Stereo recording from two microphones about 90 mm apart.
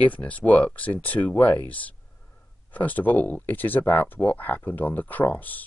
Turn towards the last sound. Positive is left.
turn(degrees=20)  # may be behind; listen again after turning